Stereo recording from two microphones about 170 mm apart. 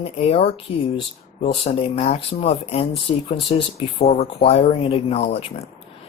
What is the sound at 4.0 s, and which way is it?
Speech, 35° left (ahead or behind).